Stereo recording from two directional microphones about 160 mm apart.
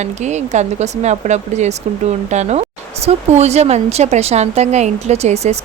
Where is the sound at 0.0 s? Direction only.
45° right (ahead or behind).